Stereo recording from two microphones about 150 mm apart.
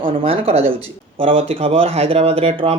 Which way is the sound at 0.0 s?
40° right (ahead or behind).